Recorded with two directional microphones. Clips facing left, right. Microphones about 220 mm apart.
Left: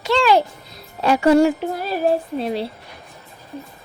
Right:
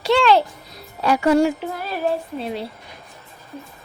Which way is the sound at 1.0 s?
30° left (ahead or behind).